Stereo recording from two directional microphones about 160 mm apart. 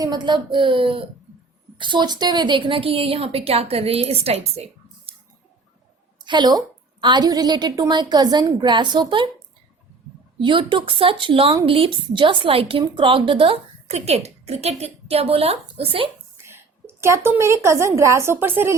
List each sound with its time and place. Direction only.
0.0 s a woman's voice: 25° right (ahead or behind)
6.2 s a woman's voice: 25° right (ahead or behind)
10.3 s a woman's voice: 30° right (ahead or behind)
16.4 s a woman's voice: 15° right (ahead or behind)